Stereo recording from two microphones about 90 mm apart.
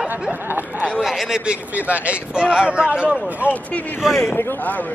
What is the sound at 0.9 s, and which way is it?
Speech, 5° right (ahead or behind).